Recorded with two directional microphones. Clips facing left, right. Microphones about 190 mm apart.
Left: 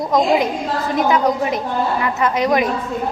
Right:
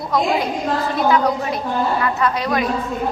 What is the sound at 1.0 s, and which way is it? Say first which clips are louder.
A woman's voice: left 2 dB; 20° left (ahead or behind).